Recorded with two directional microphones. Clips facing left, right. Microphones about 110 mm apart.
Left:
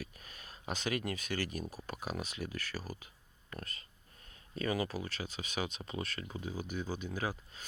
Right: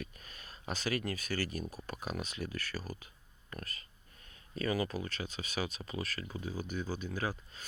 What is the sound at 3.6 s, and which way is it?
Speech, 25° left (ahead or behind).